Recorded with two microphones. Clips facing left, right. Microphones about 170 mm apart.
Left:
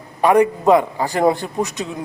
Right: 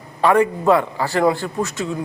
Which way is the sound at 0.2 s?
15° left (ahead or behind).